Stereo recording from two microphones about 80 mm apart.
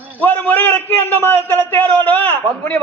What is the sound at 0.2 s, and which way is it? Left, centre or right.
A man's voice, left.